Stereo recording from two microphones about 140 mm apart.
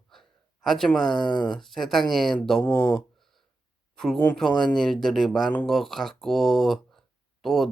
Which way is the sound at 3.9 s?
Centre (ahead or behind).